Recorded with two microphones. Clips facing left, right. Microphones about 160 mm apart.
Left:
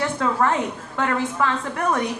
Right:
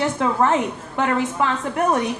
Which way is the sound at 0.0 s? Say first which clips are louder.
Right 2 dB; 20° right (ahead or behind).